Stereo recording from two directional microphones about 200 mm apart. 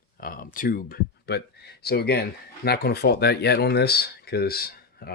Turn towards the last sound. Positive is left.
turn(degrees=50)  # may be behind; listen again after turning